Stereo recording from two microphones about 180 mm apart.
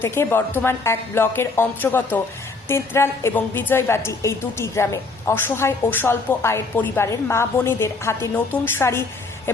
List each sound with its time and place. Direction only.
0.0 s a woman's voice: 15° left (ahead or behind)